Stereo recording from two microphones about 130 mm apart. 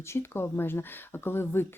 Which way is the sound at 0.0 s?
20° left (ahead or behind).